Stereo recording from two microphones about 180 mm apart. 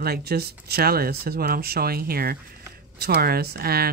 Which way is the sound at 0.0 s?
60° right (ahead or behind).